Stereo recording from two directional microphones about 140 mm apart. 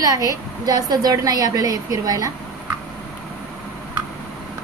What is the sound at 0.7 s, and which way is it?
A woman's voice, 25° right (ahead or behind).